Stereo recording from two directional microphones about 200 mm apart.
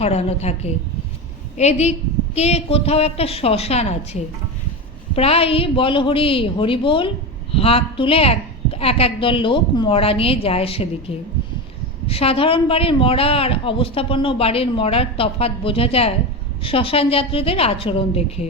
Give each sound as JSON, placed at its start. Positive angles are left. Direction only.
{"t": 0.0, "sound": "a woman's voice", "side_deg": 30}
{"t": 12.0, "sound": "a woman's voice", "side_deg": 30}